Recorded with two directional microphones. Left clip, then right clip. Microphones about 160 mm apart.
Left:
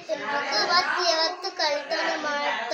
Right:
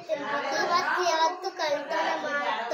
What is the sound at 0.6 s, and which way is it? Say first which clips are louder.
Child singing: left 3 dB; 20° right (ahead or behind).